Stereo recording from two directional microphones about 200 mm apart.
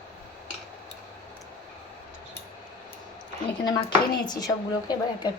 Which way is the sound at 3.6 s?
20° left (ahead or behind).